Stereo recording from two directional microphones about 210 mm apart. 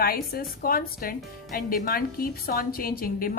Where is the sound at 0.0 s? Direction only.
45° left (ahead or behind).